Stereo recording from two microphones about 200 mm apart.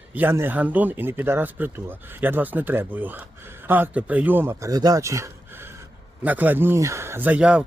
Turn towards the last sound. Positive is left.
turn(degrees=-5)  # may be behind; listen again after turning